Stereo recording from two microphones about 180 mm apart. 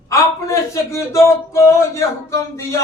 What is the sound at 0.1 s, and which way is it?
Speech, 15° left (ahead or behind).